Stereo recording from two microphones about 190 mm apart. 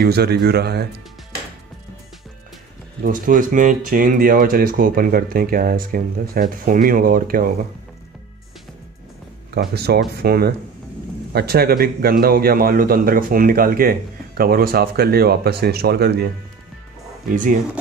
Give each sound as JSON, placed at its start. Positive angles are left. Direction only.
{"t": 0.0, "sound": "speech", "side_deg": -55}
{"t": 3.0, "sound": "a man's voice", "side_deg": -45}
{"t": 9.5, "sound": "a man's voice", "side_deg": -55}
{"t": 17.3, "sound": "a man's voice", "side_deg": -45}